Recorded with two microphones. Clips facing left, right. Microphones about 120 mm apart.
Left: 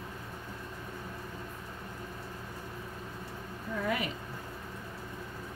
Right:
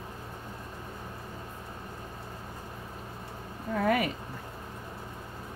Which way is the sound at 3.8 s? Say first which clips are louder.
Right 7 dB; 60° right (ahead or behind).